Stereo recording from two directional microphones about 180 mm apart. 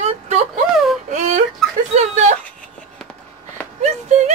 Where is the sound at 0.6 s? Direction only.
Centre (ahead or behind).